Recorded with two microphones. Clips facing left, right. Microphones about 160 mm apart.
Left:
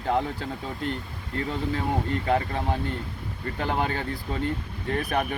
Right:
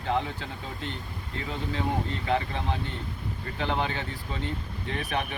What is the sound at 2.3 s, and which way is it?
Speech, 45° left (ahead or behind).